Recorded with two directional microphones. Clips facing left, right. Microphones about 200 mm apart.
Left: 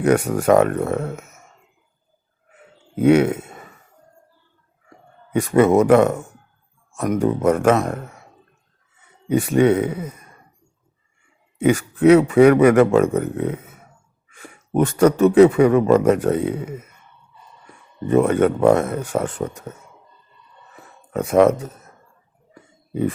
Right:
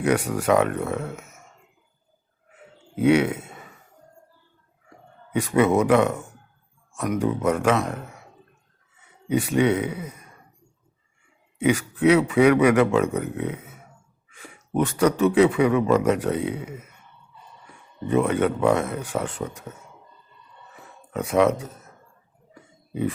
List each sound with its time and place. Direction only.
0.0 s a man's voice: 45° left (ahead or behind)
2.9 s speech: 45° left (ahead or behind)
5.3 s a man's voice: 45° left (ahead or behind)
9.3 s a man's voice: 45° left (ahead or behind)
11.6 s a man's voice: 45° left (ahead or behind)
18.1 s a man's voice: 45° left (ahead or behind)
21.1 s speech: 50° left (ahead or behind)